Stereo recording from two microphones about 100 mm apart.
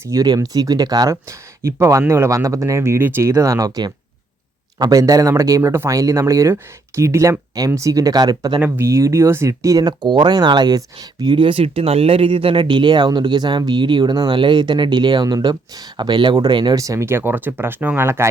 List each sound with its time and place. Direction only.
0.1 s speech: 35° right (ahead or behind)
1.1 s speech: 30° right (ahead or behind)
8.6 s speech: 20° right (ahead or behind); by 16.7 s 50° right (ahead or behind)
16.7 s speech: 35° right (ahead or behind)